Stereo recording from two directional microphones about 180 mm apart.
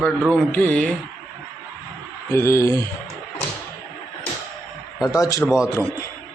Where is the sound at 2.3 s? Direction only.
15° left (ahead or behind).